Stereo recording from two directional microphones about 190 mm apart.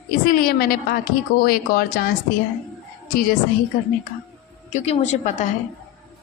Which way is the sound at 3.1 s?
50° left (ahead or behind).